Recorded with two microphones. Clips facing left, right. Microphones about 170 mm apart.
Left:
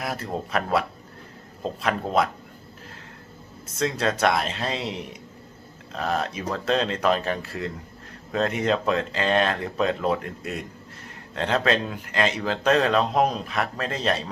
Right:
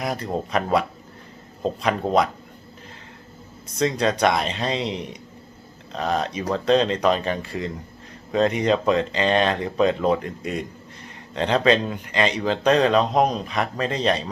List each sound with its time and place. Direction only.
0.0 s speech: 5° left (ahead or behind)
3.8 s speech: centre (ahead or behind)